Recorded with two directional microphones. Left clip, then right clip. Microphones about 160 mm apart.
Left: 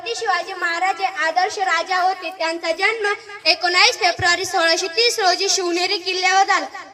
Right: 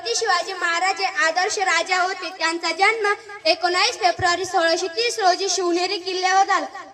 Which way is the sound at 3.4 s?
10° left (ahead or behind).